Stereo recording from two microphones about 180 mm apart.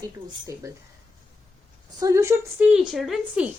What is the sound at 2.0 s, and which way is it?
Speech, 15° right (ahead or behind).